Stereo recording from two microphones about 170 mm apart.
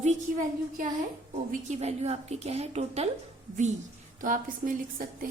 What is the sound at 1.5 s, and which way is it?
A woman's voice, 45° right (ahead or behind).